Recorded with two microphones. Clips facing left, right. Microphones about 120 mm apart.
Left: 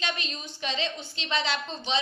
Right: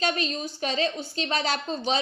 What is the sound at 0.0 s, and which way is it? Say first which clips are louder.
A woman's voice: right 7 dB; 40° right (ahead or behind).